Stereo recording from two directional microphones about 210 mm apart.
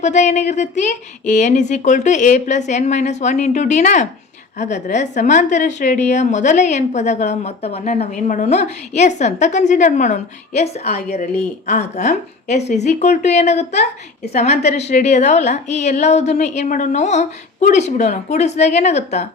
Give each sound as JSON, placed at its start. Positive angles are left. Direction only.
{"t": 0.0, "sound": "a woman's voice", "side_deg": 35}